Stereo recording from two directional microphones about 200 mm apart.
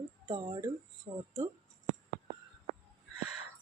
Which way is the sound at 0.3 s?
20° right (ahead or behind).